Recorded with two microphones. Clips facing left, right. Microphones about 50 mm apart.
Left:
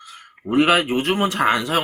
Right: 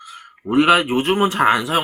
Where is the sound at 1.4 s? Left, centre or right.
Centre.